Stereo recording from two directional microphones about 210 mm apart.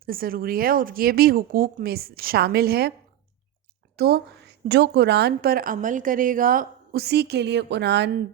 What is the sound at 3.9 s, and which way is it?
A woman's voice, 50° right (ahead or behind).